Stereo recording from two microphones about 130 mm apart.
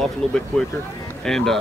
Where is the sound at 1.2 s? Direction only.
5° left (ahead or behind).